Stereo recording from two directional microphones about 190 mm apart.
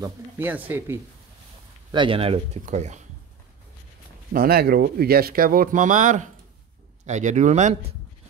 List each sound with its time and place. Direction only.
0.0 s speech: 10° right (ahead or behind)
1.9 s speech: 25° right (ahead or behind)
4.3 s speech: 50° right (ahead or behind)